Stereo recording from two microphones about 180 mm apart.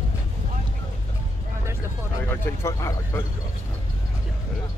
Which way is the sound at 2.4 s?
15° left (ahead or behind).